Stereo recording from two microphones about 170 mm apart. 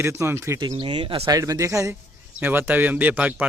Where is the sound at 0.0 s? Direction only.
15° right (ahead or behind).